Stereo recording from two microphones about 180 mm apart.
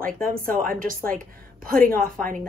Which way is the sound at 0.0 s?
50° right (ahead or behind).